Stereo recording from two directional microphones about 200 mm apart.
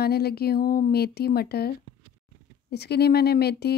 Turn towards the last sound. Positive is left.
turn(degrees=55)  # may be behind; listen again after turning